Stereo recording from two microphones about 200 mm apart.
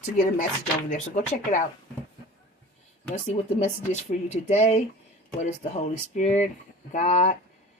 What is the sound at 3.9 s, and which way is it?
Speech, 35° left (ahead or behind).